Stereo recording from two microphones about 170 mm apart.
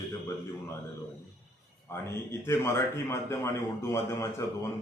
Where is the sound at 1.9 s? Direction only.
15° left (ahead or behind).